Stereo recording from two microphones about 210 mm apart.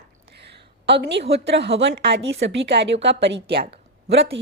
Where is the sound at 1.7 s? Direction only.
55° right (ahead or behind).